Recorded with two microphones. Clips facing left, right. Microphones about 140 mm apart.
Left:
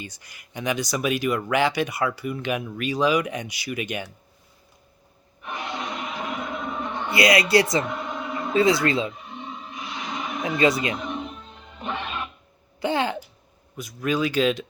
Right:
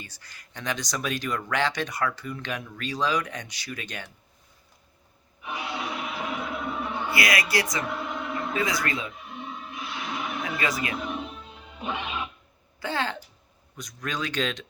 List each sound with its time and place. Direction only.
0.0 s speech: 15° left (ahead or behind)
5.4 s music: 10° right (ahead or behind)
7.1 s speech: 25° left (ahead or behind)
7.9 s a sound: centre (ahead or behind)
8.5 s speech: 25° left (ahead or behind)
9.1 s a sound: centre (ahead or behind)
10.6 s speech: 25° left (ahead or behind)
10.9 s music: 5° right (ahead or behind)
12.8 s speech: 15° left (ahead or behind)